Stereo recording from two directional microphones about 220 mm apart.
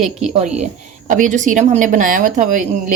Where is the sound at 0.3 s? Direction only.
30° right (ahead or behind).